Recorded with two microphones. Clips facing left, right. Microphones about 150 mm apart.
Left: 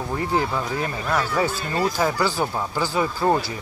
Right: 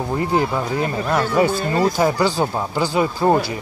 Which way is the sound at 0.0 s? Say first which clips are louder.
Right 4 dB; 20° right (ahead or behind).